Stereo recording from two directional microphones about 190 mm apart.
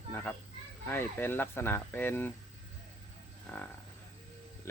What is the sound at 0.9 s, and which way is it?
Speech, 10° left (ahead or behind).